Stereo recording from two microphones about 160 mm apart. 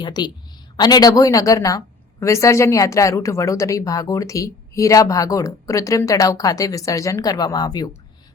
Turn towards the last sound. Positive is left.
turn(degrees=25)  # may be behind; listen again after turning